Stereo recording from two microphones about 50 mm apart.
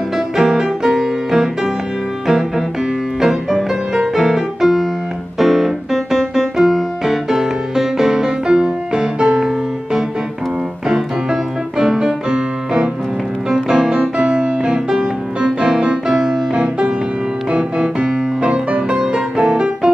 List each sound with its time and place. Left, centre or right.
0.4 s music: centre
3.2 s music: centre
5.4 s piano: centre
6.1 s music: centre
11.8 s music: centre